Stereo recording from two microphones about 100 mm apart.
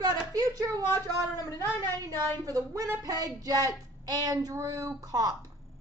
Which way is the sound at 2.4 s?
35° right (ahead or behind).